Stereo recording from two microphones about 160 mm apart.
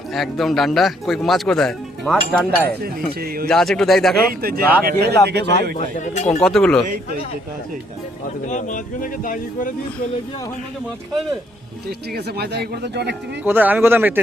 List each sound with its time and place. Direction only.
0.1 s speech: centre (ahead or behind)
3.2 s speech: 70° right (ahead or behind)
3.4 s speech: 5° left (ahead or behind)
4.4 s speech: 70° right (ahead or behind)
5.2 s speech: 90° right
6.4 s speech: 5° left (ahead or behind)
8.4 s speech: 50° left (ahead or behind)
11.9 s speech: 85° right
13.4 s speech: 10° right (ahead or behind)